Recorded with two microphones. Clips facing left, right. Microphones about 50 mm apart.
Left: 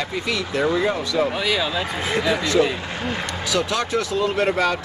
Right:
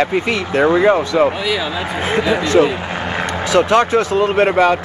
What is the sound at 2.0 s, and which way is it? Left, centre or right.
Speech, right.